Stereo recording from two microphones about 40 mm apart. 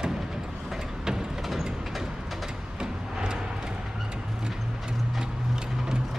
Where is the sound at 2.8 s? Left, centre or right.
Centre.